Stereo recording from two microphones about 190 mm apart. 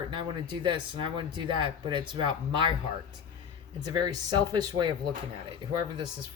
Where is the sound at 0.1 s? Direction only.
25° right (ahead or behind).